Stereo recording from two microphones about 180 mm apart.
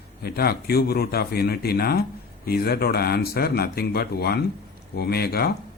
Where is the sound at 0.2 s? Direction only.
60° left (ahead or behind).